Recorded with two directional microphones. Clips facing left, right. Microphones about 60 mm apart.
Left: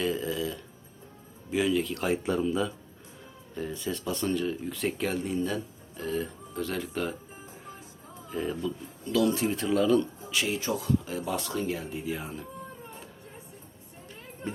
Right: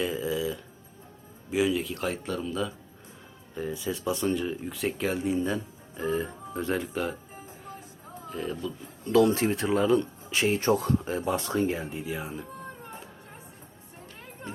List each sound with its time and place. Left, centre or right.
0.0 s a sound: centre
1.5 s a man's voice: centre
2.0 s speech: centre
3.5 s speech: centre; by 6.8 s right
6.9 s speech: centre
8.3 s a man's voice: centre
9.0 s speech: right
9.7 s speech: right
11.0 s speech: right
11.9 s speech: centre